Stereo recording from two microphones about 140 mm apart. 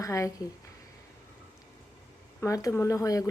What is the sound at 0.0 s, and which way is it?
Speech, 25° left (ahead or behind).